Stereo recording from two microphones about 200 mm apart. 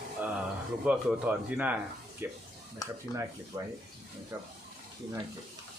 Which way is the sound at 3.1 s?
15° right (ahead or behind).